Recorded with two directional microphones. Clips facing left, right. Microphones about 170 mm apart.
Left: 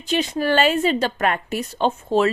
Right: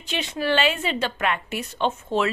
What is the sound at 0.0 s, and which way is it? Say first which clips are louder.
A woman's voice: left 5 dB; 40° left (ahead or behind).